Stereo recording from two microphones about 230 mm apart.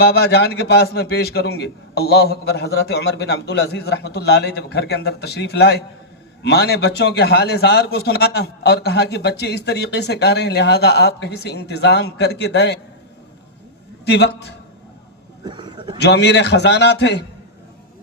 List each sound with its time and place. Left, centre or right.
0.0 s a man's voice: left
14.0 s a man's voice: left
15.4 s a sound: centre
16.0 s a man's voice: left